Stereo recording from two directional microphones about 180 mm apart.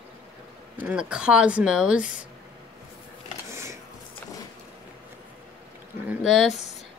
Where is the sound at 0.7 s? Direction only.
5° right (ahead or behind).